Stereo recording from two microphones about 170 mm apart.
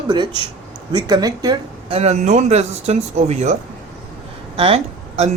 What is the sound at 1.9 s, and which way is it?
Speech, 40° right (ahead or behind).